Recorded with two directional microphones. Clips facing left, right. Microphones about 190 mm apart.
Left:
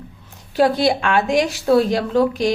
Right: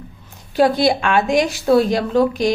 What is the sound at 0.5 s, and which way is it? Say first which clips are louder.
A woman's voice: right 1 dB; 15° right (ahead or behind).